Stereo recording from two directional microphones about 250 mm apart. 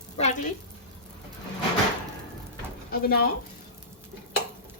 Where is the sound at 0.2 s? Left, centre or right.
Left.